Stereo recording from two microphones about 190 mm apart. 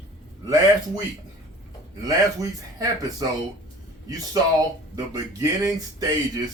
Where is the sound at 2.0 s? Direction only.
20° right (ahead or behind).